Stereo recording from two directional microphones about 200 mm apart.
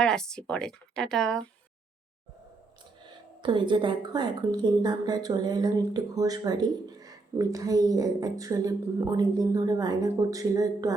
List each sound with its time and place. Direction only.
0.0 s speech: 5° left (ahead or behind)
3.4 s speech: 25° right (ahead or behind)